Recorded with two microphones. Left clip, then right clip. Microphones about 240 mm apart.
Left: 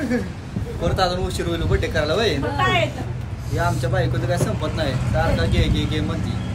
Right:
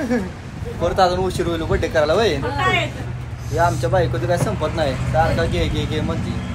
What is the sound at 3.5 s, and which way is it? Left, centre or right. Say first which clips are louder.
Speech: right 5 dB; centre.